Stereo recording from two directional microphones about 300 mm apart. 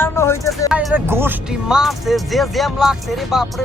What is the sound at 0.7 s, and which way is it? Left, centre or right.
Speech, centre.